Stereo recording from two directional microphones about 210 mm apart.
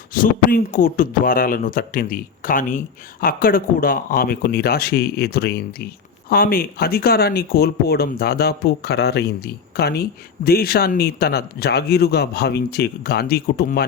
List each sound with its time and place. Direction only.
0.1 s speech: 40° left (ahead or behind)